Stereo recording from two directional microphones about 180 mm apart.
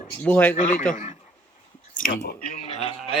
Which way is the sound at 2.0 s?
45° left (ahead or behind).